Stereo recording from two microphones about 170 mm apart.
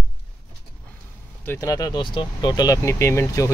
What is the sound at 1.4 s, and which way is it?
Speech, 20° left (ahead or behind).